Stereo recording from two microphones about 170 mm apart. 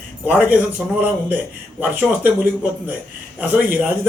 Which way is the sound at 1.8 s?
10° right (ahead or behind).